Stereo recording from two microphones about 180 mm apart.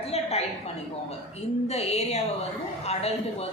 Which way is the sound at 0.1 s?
35° left (ahead or behind).